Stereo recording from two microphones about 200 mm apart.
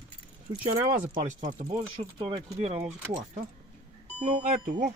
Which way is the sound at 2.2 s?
30° right (ahead or behind).